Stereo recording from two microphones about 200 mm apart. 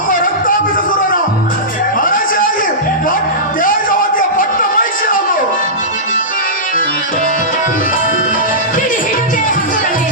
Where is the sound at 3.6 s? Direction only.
45° left (ahead or behind).